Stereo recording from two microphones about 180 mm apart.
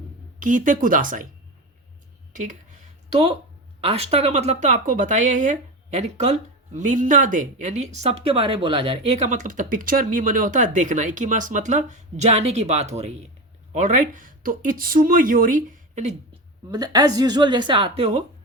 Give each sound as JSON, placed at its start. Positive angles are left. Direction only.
{"t": 0.3, "sound": "speech", "side_deg": -45}
{"t": 2.3, "sound": "a sound", "side_deg": -45}
{"t": 3.8, "sound": "speech", "side_deg": -35}
{"t": 16.6, "sound": "speech", "side_deg": -20}